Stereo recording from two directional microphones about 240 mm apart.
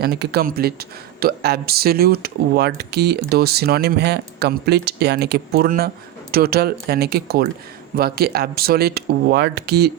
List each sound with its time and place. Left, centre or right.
0.0 s speech: right